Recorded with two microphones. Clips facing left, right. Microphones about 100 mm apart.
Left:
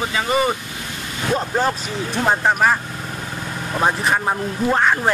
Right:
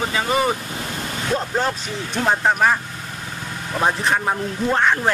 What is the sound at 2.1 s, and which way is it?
Speech, centre (ahead or behind).